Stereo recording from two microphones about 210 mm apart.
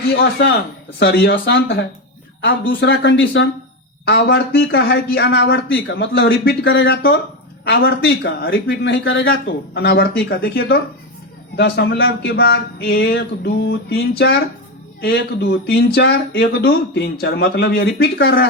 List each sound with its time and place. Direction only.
0.2 s speech: 50° left (ahead or behind)